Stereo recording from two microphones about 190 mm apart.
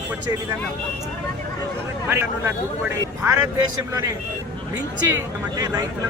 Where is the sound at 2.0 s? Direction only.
15° right (ahead or behind).